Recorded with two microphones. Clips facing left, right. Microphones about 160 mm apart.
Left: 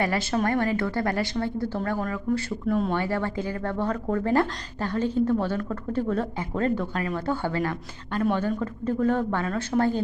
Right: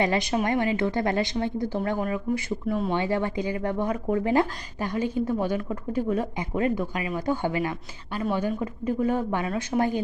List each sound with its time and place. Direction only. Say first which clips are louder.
0.0 s speech: right 1 dB; 20° right (ahead or behind)
2.9 s speech: right 1 dB; 15° right (ahead or behind)